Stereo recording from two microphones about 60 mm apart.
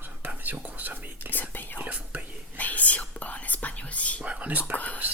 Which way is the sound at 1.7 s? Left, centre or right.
Right.